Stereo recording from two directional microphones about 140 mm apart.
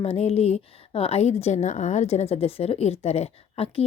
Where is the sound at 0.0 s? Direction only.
50° left (ahead or behind).